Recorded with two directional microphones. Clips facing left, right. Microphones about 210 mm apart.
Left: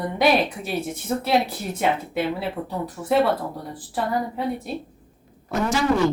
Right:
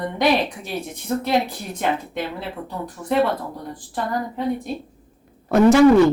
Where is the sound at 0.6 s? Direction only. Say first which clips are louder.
Left 2 dB; 5° left (ahead or behind).